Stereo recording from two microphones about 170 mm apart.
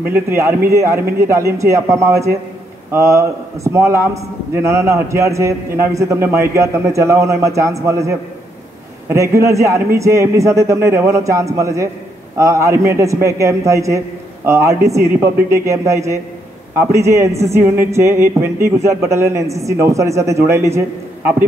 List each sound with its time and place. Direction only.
0.3 s a man's voice: 15° right (ahead or behind)